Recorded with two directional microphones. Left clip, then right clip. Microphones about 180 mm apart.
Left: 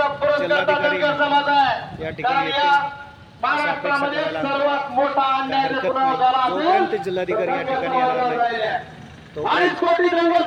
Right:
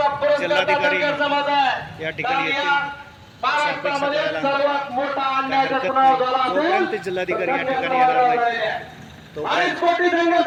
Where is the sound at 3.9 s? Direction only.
5° left (ahead or behind).